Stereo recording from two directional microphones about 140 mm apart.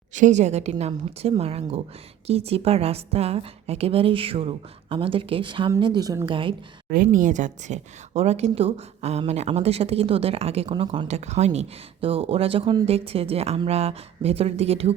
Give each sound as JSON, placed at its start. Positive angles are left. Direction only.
{"t": 0.1, "sound": "a woman's voice", "side_deg": -60}
{"t": 6.9, "sound": "a woman's voice", "side_deg": -75}
{"t": 11.1, "sound": "a woman's voice", "side_deg": -55}